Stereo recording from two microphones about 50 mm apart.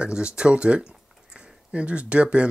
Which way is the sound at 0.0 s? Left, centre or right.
Centre.